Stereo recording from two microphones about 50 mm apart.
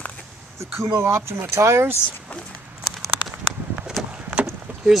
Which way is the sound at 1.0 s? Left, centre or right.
Right.